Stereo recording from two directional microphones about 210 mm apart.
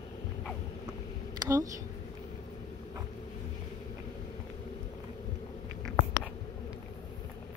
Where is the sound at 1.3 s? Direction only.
15° right (ahead or behind).